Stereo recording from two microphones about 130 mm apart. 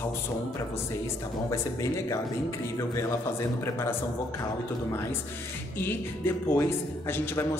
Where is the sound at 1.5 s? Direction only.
25° left (ahead or behind).